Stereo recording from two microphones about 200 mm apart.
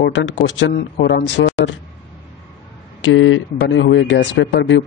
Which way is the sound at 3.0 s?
70° left (ahead or behind).